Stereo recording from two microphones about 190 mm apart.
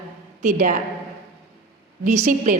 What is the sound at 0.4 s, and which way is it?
Speech, 40° right (ahead or behind).